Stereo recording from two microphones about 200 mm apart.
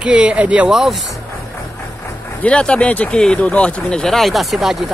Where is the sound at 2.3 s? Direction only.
5° left (ahead or behind).